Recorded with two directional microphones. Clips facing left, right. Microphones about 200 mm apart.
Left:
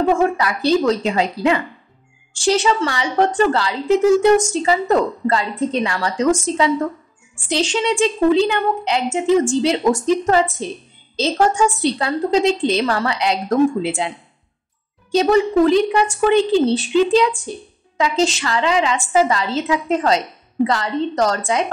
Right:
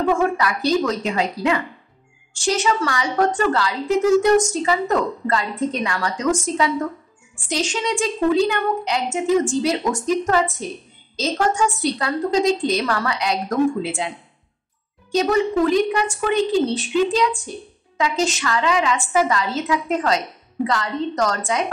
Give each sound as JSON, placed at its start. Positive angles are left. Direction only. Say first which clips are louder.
{"t": 0.1, "sound": "a woman's voice", "louder": "left 2 dB", "side_deg": 30}